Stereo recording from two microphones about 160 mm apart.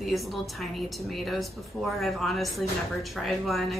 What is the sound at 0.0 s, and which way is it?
A woman's voice, centre (ahead or behind).